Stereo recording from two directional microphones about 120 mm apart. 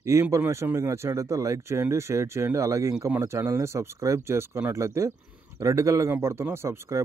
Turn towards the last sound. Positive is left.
turn(degrees=-20)  # may be behind; listen again after turning